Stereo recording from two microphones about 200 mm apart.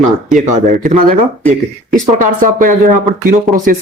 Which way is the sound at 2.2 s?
40° right (ahead or behind).